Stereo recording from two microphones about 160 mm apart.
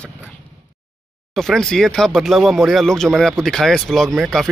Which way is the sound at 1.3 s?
5° left (ahead or behind).